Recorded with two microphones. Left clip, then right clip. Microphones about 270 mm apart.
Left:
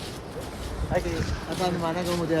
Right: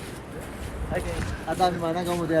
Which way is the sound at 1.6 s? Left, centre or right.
Centre.